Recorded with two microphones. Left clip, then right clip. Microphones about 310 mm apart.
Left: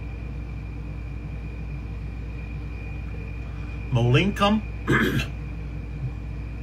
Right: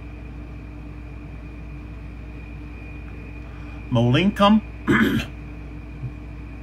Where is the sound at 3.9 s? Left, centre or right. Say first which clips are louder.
Right 2 dB; right.